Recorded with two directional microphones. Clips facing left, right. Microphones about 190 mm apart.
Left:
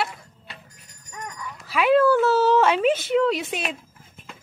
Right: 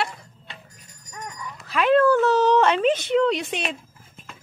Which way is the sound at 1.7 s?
10° left (ahead or behind).